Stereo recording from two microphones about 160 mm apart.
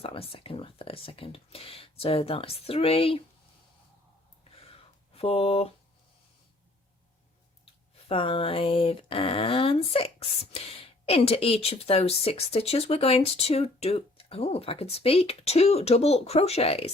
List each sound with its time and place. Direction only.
0.0 s speech: 35° left (ahead or behind)
4.6 s a sound: 35° left (ahead or behind)
7.6 s speech: 35° left (ahead or behind)